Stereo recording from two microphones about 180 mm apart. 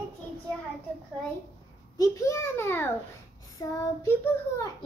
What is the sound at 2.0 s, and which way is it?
A child's voice, 15° left (ahead or behind).